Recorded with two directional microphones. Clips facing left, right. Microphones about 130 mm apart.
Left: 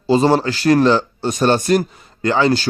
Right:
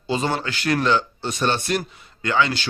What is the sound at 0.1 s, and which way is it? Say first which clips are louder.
A man's voice: left 10 dB; 35° left (ahead or behind).